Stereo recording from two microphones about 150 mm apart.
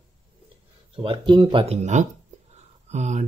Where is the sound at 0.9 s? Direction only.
35° right (ahead or behind).